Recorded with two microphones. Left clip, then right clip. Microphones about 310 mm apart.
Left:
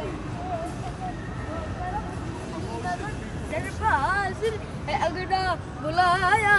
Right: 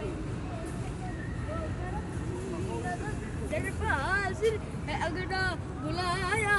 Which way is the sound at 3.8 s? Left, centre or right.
Left.